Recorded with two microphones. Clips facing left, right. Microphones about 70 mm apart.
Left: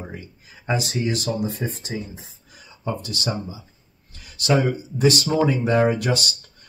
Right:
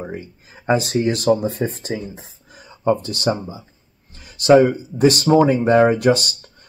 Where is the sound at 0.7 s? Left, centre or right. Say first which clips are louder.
Right 4 dB; right.